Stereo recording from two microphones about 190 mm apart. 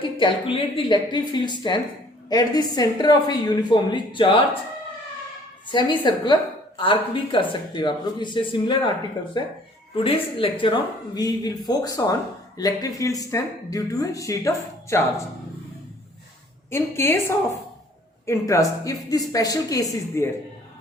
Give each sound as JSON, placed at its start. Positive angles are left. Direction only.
{"t": 0.2, "sound": "speech", "side_deg": 25}
{"t": 5.6, "sound": "speech", "side_deg": 25}
{"t": 16.6, "sound": "speech", "side_deg": 15}